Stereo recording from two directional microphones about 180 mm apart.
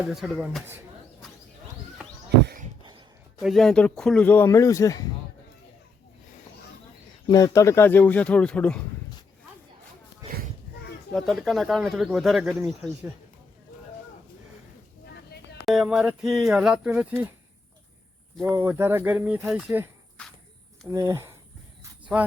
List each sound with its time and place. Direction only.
0.1 s speech: centre (ahead or behind)
3.4 s speech: centre (ahead or behind); by 5.0 s 20° left (ahead or behind)
7.3 s speech: 20° left (ahead or behind)
11.1 s speech: centre (ahead or behind)
15.6 s speech: centre (ahead or behind)
18.4 s speech: 15° right (ahead or behind)
20.2 s speech: 5° left (ahead or behind)
20.9 s speech: 15° right (ahead or behind)
22.0 s a sound: 10° right (ahead or behind)